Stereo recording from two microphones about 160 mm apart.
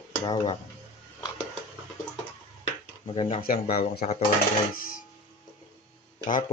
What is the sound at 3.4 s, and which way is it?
Speech, 65° left (ahead or behind).